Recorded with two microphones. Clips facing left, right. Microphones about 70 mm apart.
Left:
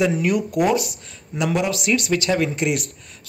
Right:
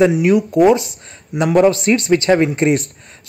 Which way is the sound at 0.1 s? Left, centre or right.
Centre.